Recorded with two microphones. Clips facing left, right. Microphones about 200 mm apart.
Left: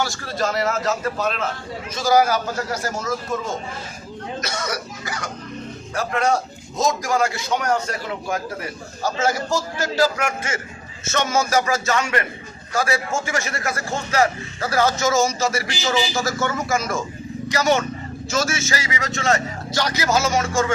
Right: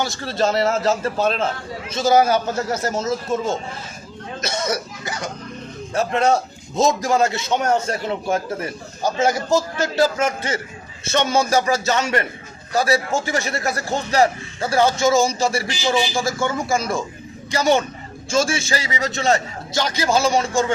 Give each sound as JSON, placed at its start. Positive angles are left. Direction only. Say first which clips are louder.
{"t": 0.0, "sound": "a man's voice", "louder": "right 3 dB", "side_deg": -25}
{"t": 4.4, "sound": "throat clearing", "louder": "right 5 dB", "side_deg": -25}
{"t": 5.9, "sound": "a man's voice", "louder": "right 3 dB", "side_deg": -25}
{"t": 16.6, "sound": "a man's voice", "louder": "right 1 dB", "side_deg": -30}